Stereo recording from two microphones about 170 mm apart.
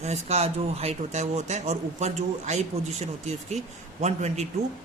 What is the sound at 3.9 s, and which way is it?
Speech, 40° right (ahead or behind).